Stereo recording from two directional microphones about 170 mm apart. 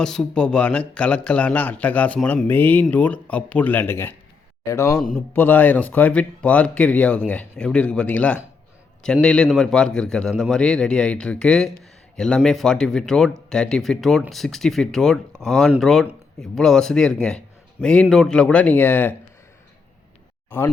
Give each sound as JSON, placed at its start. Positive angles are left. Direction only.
{"t": 0.0, "sound": "speech", "side_deg": 5}